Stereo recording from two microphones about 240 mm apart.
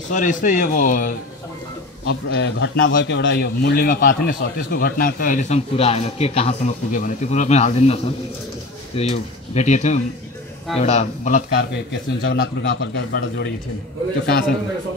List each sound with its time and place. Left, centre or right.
0.1 s a man's voice: left
2.0 s a man's voice: left
11.5 s a man's voice: left